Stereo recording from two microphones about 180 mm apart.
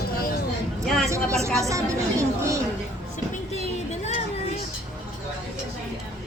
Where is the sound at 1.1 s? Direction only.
15° right (ahead or behind).